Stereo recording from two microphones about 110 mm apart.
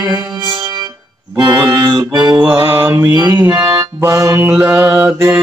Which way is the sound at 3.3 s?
30° right (ahead or behind).